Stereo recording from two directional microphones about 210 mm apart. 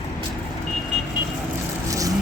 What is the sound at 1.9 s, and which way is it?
Vehicle, 15° right (ahead or behind).